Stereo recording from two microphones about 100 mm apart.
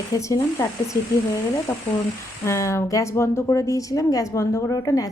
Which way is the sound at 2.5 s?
30° left (ahead or behind).